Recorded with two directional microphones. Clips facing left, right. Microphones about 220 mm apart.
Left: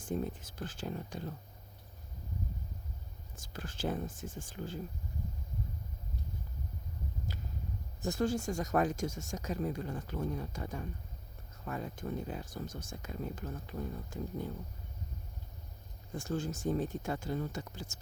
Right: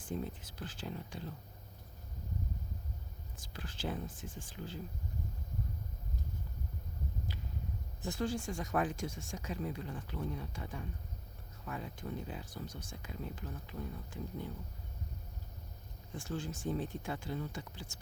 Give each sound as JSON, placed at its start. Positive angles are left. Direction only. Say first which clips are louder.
{"t": 0.0, "sound": "speech", "louder": "left 4 dB", "side_deg": 45}
{"t": 3.3, "sound": "speech", "louder": "left 4 dB", "side_deg": 45}
{"t": 7.3, "sound": "a sound", "louder": "left 1 dB", "side_deg": 45}
{"t": 8.0, "sound": "speech", "louder": "left 4 dB", "side_deg": 45}
{"t": 16.1, "sound": "speech", "louder": "left 4 dB", "side_deg": 45}